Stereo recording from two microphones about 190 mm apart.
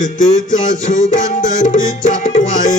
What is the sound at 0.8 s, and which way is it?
Music, 40° left (ahead or behind).